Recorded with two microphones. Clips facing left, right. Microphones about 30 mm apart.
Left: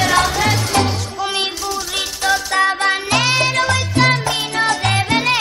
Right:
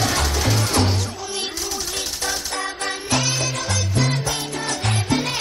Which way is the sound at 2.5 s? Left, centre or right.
Left.